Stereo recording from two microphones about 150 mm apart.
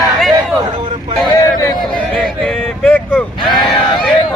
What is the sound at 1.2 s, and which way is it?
Speech, 25° left (ahead or behind).